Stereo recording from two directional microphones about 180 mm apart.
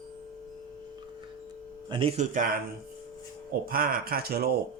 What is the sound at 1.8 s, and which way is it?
Speech, 30° right (ahead or behind).